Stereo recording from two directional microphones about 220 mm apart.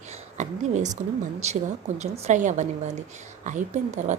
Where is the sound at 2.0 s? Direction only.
30° right (ahead or behind).